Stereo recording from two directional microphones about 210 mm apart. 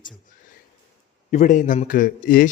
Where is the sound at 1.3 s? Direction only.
35° left (ahead or behind).